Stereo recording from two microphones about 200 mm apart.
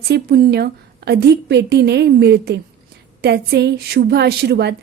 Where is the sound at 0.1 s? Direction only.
55° right (ahead or behind).